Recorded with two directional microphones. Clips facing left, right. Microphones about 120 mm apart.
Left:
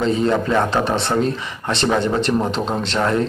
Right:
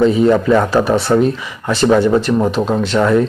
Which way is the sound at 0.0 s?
5° right (ahead or behind).